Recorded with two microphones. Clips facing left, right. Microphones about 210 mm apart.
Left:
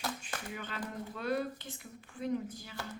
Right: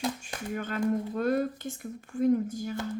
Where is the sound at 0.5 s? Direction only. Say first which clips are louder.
Right 15 dB; 50° right (ahead or behind).